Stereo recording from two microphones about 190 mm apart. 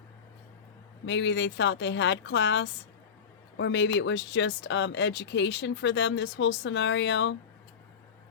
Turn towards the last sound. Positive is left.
turn(degrees=70)  # may be behind; listen again after turning